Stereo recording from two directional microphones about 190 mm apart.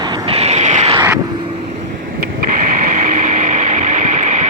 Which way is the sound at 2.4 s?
45° right (ahead or behind).